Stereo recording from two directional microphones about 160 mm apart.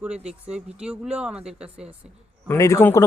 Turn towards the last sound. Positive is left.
turn(degrees=15)  # may be behind; listen again after turning